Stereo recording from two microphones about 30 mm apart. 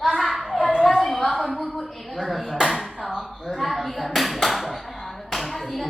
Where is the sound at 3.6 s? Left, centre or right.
Centre.